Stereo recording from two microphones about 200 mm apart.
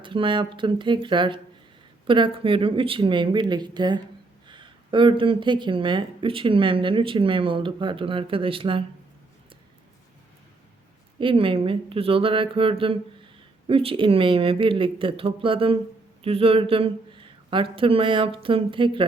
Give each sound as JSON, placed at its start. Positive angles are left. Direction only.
{"t": 0.0, "sound": "speech", "side_deg": -25}
{"t": 11.2, "sound": "speech", "side_deg": -25}